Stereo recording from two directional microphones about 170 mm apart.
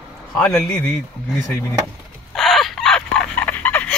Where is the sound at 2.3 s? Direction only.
Centre (ahead or behind).